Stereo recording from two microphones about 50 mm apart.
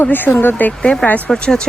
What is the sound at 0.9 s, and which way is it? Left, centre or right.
Speech, left.